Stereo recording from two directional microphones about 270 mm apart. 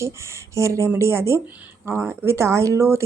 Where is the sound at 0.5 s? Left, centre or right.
Centre.